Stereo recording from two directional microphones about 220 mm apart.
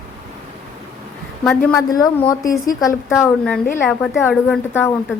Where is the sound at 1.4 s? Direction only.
5° left (ahead or behind).